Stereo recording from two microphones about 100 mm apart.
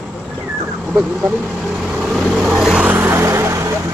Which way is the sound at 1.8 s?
5° right (ahead or behind).